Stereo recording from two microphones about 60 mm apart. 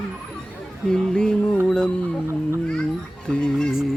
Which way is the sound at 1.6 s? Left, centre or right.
Centre.